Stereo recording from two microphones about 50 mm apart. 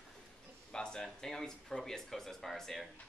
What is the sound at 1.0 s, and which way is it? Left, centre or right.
Speech, centre.